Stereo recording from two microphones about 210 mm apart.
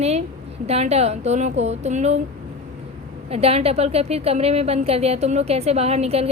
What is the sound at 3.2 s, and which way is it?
A woman's voice, 30° right (ahead or behind).